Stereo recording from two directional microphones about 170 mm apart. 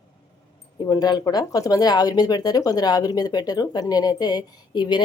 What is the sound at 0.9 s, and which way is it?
Speech, 20° left (ahead or behind).